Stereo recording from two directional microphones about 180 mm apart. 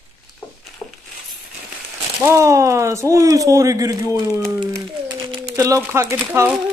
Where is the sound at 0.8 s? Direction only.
15° left (ahead or behind).